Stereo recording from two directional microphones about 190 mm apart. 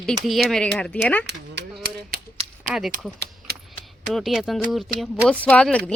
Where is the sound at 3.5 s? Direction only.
55° right (ahead or behind).